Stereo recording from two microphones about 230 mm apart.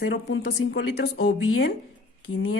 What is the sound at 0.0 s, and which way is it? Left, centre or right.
A woman's voice, left.